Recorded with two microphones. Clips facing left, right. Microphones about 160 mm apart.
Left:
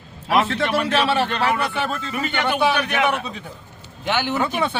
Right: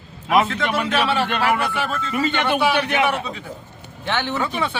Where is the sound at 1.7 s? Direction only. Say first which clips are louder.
Right 1 dB; 25° left (ahead or behind).